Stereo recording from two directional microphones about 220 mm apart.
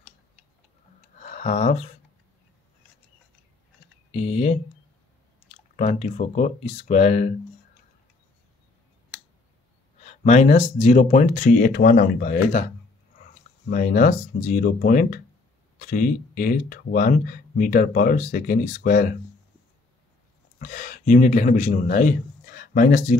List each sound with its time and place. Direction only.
1.2 s a sound: 30° left (ahead or behind)
4.1 s typing: 30° left (ahead or behind)
5.8 s speech: 30° left (ahead or behind)
10.0 s speech: 30° left (ahead or behind)
13.7 s speech: 40° left (ahead or behind)
20.5 s a man's voice: 35° left (ahead or behind)